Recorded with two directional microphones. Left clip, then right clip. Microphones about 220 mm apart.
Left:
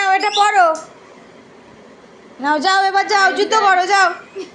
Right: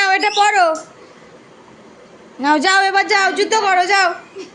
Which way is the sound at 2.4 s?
25° right (ahead or behind).